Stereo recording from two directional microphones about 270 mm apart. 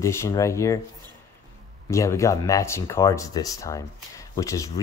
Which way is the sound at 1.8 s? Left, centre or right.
Centre.